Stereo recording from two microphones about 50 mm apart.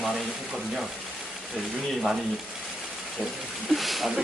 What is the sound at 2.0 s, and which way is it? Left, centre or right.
Speech, centre.